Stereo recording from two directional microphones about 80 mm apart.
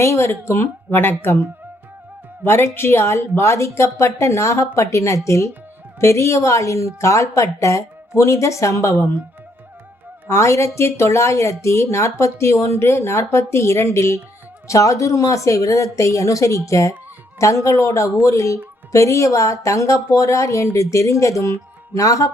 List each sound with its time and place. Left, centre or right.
0.0 s a woman's voice: left
2.4 s a woman's voice: left
10.2 s a woman's voice: left